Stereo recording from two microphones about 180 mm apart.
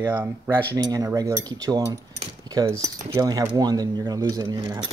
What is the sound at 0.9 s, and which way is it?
Speech, 20° right (ahead or behind).